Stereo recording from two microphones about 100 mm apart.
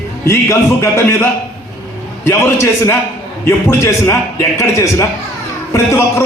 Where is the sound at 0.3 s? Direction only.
25° left (ahead or behind).